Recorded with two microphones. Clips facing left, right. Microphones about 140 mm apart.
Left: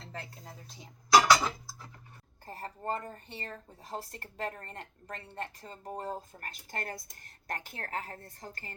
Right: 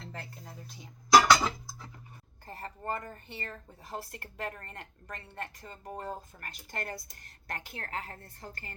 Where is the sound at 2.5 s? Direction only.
40° left (ahead or behind).